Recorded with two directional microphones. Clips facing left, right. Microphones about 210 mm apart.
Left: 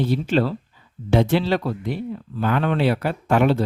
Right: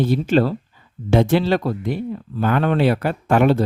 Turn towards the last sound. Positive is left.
turn(degrees=-50)  # may be behind; listen again after turning